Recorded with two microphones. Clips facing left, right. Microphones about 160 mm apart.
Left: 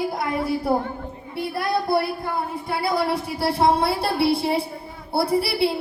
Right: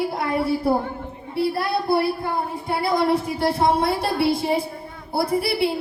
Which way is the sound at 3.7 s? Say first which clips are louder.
Even; 30° left (ahead or behind).